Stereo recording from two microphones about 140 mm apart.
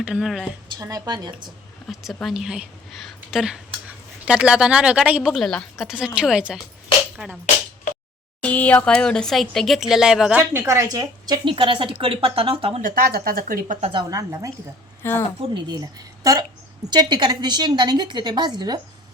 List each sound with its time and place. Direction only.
0.0 s a woman's voice: 5° right (ahead or behind)
0.8 s a woman's voice: 25° right (ahead or behind)
1.9 s a woman's voice: centre (ahead or behind)
7.2 s a sound: 5° right (ahead or behind)
8.4 s a woman's voice: 10° left (ahead or behind)
10.5 s a woman's voice: 20° right (ahead or behind); by 12.8 s 40° right (ahead or behind)
12.8 s speech: 90° right
14.1 s a woman's voice: 25° right (ahead or behind)
15.0 s a woman's voice: 15° left (ahead or behind)
15.7 s a woman's voice: 25° right (ahead or behind)